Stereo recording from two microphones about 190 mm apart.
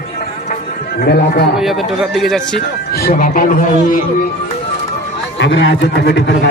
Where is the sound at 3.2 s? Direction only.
45° left (ahead or behind).